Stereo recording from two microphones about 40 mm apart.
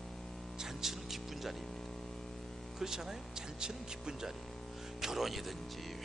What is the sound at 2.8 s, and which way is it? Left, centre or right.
Speech, centre.